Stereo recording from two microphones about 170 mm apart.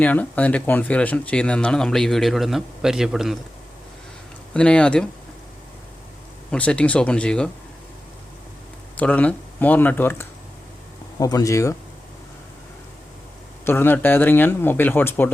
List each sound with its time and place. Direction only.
0.0 s speech: 10° left (ahead or behind)
4.5 s speech: 5° left (ahead or behind)
6.5 s speech: 5° left (ahead or behind)
9.0 s speech: 10° left (ahead or behind)
13.7 s speech: 10° left (ahead or behind)